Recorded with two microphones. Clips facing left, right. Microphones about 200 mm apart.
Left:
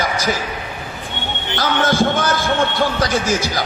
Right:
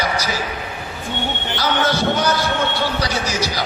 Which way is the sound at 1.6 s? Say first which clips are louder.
Left 3 dB; 50° left (ahead or behind).